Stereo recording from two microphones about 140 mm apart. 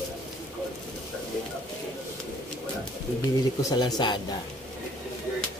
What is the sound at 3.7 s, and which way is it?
Speech, 30° left (ahead or behind).